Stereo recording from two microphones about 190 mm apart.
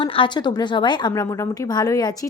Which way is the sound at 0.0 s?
25° left (ahead or behind).